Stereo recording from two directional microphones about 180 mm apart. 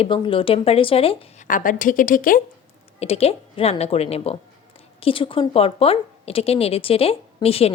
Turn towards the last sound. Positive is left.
turn(degrees=35)  # may be behind; listen again after turning